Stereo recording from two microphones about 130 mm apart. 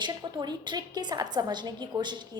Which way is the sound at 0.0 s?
35° right (ahead or behind).